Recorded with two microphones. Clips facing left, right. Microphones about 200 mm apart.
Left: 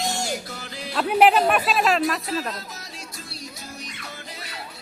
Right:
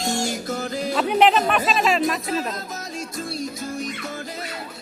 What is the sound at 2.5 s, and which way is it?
Music, 50° right (ahead or behind).